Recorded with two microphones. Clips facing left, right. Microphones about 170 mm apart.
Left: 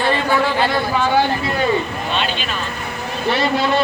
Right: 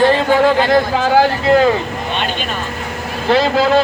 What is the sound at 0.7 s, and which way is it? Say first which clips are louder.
A man's voice: right 5 dB; 90° right.